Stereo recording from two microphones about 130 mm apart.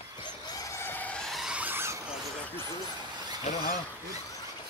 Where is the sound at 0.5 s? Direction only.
25° left (ahead or behind); by 2.0 s 15° right (ahead or behind).